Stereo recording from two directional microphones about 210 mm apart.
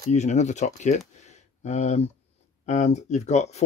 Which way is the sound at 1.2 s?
30° left (ahead or behind).